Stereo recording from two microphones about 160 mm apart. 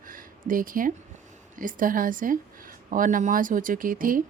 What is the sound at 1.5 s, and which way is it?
A woman's voice, 60° right (ahead or behind).